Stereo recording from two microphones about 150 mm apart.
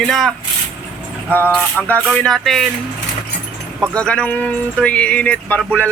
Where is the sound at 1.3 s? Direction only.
10° left (ahead or behind).